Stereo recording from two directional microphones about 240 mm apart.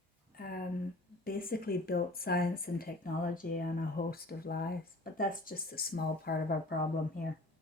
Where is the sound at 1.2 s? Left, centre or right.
Left.